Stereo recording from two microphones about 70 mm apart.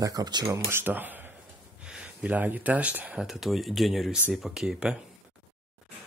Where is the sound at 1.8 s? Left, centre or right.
Centre.